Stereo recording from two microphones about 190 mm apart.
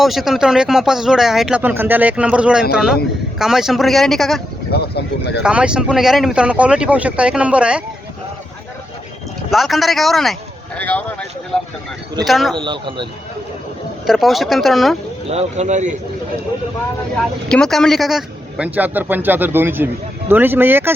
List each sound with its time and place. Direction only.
0.0 s speech: centre (ahead or behind)
4.7 s speech: 60° left (ahead or behind)
5.4 s speech: 5° right (ahead or behind)
9.5 s speech: centre (ahead or behind)
12.5 s speech: 25° right (ahead or behind)
14.1 s speech: centre (ahead or behind)
15.3 s speech: 35° right (ahead or behind)
17.5 s a man's voice: 5° left (ahead or behind)